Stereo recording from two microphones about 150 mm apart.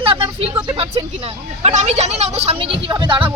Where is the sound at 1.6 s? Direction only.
45° right (ahead or behind).